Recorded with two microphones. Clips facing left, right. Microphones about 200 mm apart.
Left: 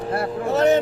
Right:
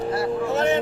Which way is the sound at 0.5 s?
40° left (ahead or behind).